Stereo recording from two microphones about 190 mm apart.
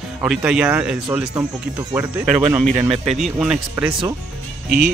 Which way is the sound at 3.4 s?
5° right (ahead or behind).